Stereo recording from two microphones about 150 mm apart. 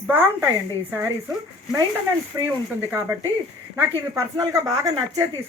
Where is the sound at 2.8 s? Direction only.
15° right (ahead or behind).